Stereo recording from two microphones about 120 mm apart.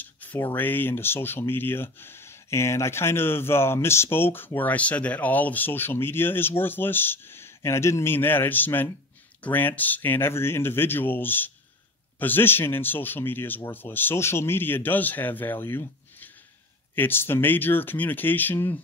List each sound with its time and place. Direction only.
0.0 s speech: 15° left (ahead or behind)